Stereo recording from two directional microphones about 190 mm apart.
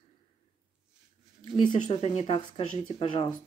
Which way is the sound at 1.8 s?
30° left (ahead or behind).